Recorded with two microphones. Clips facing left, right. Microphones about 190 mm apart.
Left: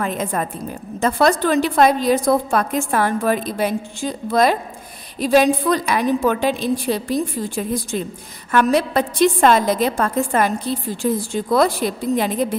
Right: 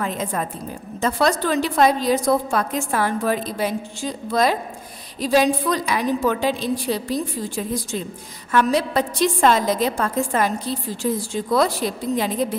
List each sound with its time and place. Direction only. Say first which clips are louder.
0.0 s a woman's voice: left 2 dB; 55° left (ahead or behind)